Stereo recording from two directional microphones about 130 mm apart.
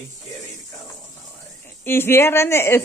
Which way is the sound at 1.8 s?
20° left (ahead or behind).